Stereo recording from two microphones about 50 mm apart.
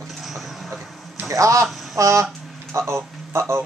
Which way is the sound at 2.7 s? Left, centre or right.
Right.